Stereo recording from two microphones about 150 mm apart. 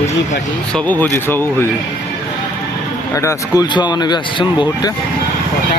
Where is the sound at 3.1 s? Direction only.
20° left (ahead or behind).